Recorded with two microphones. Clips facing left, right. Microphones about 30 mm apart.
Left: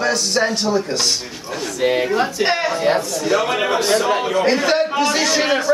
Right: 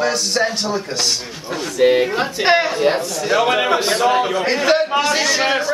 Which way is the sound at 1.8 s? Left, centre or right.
Centre.